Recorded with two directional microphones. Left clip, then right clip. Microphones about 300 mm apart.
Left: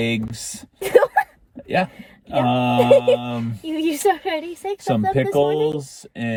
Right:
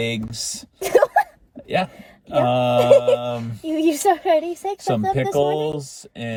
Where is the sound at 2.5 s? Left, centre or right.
Centre.